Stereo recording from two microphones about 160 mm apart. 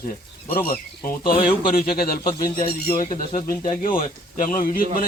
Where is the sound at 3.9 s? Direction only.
60° left (ahead or behind).